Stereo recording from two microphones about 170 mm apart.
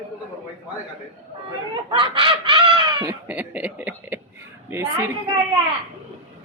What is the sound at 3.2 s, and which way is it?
Speech, 10° right (ahead or behind).